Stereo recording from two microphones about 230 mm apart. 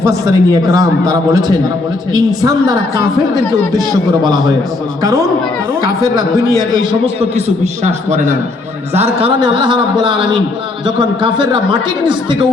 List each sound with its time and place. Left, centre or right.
0.3 s a man's voice: centre
3.7 s a man's voice: centre
5.8 s speech: left
7.2 s speech: right